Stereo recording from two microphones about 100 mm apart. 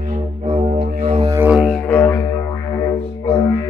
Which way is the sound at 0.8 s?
90° right.